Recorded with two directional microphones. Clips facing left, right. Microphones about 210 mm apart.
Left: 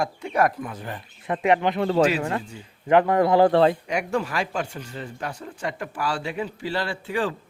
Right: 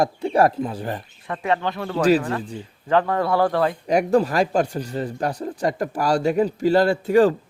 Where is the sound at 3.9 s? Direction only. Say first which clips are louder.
Right 8 dB; 35° right (ahead or behind).